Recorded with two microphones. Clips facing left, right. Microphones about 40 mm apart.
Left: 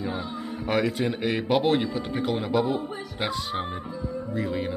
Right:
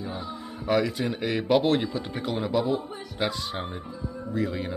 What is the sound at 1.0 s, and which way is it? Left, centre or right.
A man's voice, centre.